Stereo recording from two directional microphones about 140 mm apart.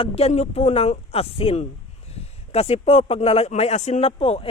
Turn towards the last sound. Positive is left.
turn(degrees=45)  # may be behind; listen again after turning